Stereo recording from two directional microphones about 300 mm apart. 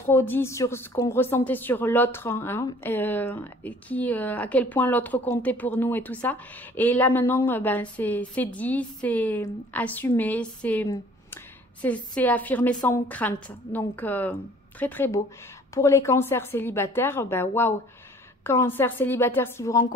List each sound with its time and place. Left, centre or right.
0.0 s a woman's voice: centre